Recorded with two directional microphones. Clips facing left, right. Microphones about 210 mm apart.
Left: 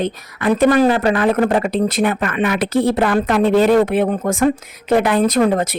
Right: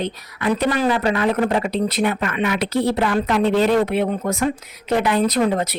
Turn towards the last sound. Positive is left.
turn(degrees=50)  # may be behind; listen again after turning